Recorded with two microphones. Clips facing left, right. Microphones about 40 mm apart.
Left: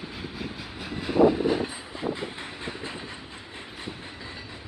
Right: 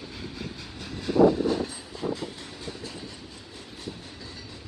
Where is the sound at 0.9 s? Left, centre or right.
Centre.